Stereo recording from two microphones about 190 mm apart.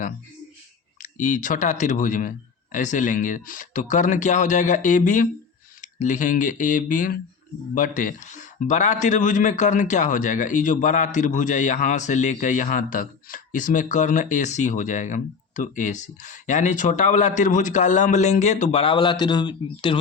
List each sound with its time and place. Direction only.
1.0 s a man's voice: 40° left (ahead or behind); by 20.0 s 25° left (ahead or behind)